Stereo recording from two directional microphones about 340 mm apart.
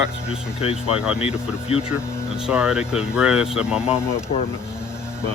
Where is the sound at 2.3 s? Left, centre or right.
Centre.